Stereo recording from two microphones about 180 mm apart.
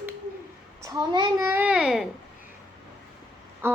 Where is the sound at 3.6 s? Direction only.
15° right (ahead or behind).